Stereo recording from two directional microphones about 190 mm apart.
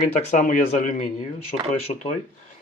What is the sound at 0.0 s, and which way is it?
Speech, 40° left (ahead or behind).